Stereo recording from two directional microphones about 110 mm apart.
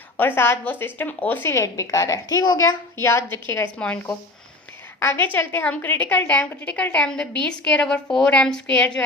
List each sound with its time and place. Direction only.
0.2 s a woman's voice: 20° left (ahead or behind)